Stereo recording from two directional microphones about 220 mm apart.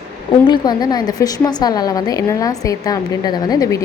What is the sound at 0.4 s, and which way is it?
A woman's voice, 20° left (ahead or behind).